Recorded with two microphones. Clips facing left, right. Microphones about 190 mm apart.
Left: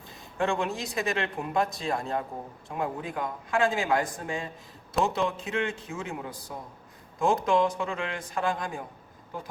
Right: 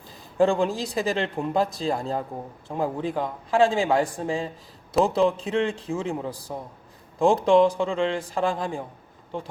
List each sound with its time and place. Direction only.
0.3 s speech: 35° right (ahead or behind)